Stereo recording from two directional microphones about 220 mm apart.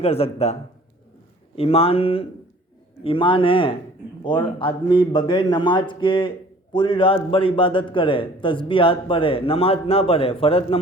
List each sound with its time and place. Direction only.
0.0 s a man's voice: 25° left (ahead or behind)
1.5 s a man's voice: 25° left (ahead or behind)